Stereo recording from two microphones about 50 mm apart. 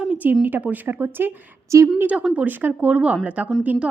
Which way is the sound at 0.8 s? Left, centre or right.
Right.